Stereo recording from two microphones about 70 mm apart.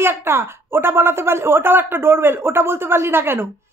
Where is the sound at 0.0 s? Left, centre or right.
Right.